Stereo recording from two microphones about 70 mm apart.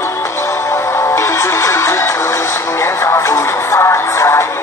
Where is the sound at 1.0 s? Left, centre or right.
Left.